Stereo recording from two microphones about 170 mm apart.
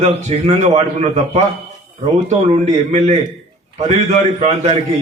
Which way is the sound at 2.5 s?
40° right (ahead or behind).